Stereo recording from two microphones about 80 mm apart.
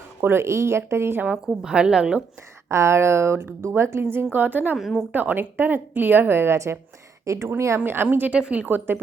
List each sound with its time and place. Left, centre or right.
0.2 s speech: right
1.2 s a woman's voice: centre
2.6 s a woman's voice: right
4.8 s a woman's voice: centre
5.1 s a woman's voice: right
8.0 s a woman's voice: centre